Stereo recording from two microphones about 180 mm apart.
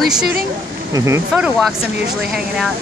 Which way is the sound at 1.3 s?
5° right (ahead or behind).